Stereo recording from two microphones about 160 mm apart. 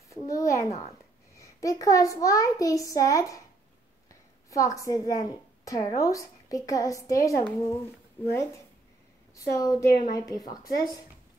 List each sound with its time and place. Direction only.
0.1 s a child's voice: 20° left (ahead or behind)